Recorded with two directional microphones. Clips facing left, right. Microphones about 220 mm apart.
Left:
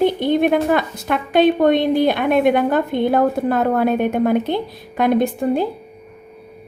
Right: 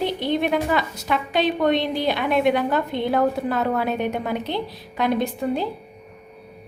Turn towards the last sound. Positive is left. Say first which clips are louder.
# left 5 dB
turn(degrees=50)  # may be behind; listen again after turning